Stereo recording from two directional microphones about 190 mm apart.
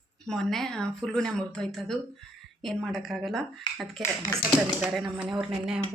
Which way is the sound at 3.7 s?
25° left (ahead or behind).